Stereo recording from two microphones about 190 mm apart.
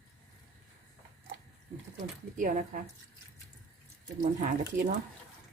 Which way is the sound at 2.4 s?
45° right (ahead or behind).